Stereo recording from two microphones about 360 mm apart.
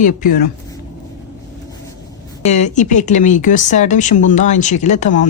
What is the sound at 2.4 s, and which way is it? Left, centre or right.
Speech, centre.